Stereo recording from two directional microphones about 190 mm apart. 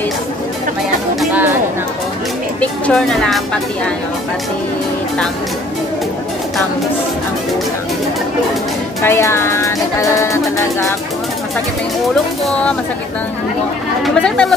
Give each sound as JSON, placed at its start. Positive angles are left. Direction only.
{"t": 1.2, "sound": "music", "side_deg": -10}
{"t": 2.6, "sound": "speech", "side_deg": 5}
{"t": 9.0, "sound": "music", "side_deg": 15}
{"t": 14.0, "sound": "speech", "side_deg": 5}